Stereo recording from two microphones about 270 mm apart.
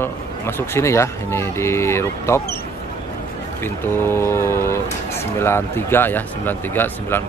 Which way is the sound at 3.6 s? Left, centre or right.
Centre.